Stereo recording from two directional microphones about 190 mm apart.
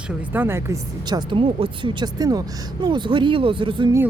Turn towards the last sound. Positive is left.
turn(degrees=-25)  # may be behind; listen again after turning